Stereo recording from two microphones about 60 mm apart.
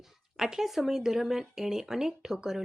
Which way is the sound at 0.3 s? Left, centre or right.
Centre.